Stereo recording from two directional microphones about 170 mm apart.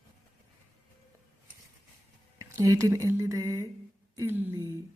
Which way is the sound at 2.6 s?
20° right (ahead or behind).